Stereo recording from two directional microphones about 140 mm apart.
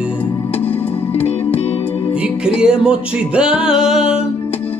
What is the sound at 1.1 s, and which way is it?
Music, 45° left (ahead or behind).